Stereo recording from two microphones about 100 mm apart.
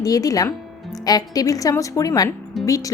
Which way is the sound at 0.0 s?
35° left (ahead or behind).